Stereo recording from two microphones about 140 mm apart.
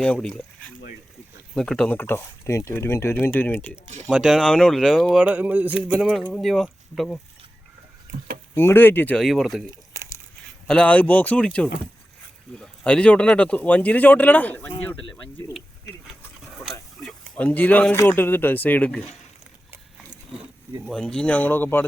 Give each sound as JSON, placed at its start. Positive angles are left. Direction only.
{"t": 0.0, "sound": "speech", "side_deg": 5}
{"t": 2.0, "sound": "speech", "side_deg": 15}
{"t": 4.1, "sound": "speech", "side_deg": 0}
{"t": 8.5, "sound": "speech", "side_deg": 15}
{"t": 9.1, "sound": "speech", "side_deg": 0}
{"t": 10.7, "sound": "speech", "side_deg": 10}
{"t": 16.0, "sound": "a sound", "side_deg": 0}
{"t": 17.0, "sound": "speech", "side_deg": 5}
{"t": 20.8, "sound": "speech", "side_deg": 5}